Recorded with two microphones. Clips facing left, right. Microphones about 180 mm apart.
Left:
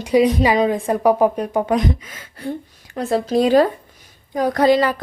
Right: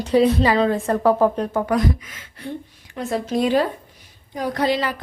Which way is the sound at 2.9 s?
35° left (ahead or behind).